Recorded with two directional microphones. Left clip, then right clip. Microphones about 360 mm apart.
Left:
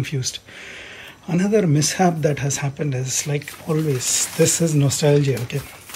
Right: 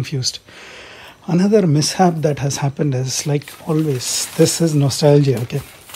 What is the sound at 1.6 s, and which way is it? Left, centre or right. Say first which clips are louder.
Speech: right 3 dB; centre.